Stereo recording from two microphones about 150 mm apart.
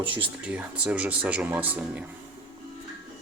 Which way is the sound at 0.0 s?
35° right (ahead or behind).